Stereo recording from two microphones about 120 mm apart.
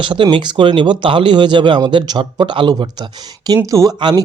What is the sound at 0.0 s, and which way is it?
Speech, 40° right (ahead or behind).